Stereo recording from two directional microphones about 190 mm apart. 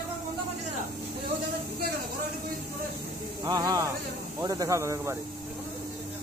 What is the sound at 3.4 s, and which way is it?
Speech, 20° right (ahead or behind).